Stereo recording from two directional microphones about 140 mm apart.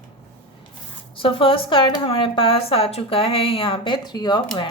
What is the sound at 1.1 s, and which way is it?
Speech, 40° left (ahead or behind).